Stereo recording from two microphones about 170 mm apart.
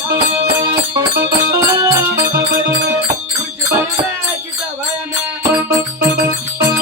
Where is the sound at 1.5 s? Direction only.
20° right (ahead or behind).